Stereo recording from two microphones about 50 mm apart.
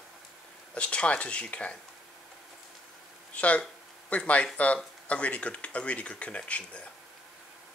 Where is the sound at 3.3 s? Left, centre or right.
Left.